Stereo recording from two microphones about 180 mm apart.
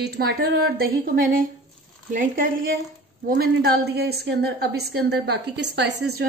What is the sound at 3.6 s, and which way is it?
A woman's voice, 65° right (ahead or behind).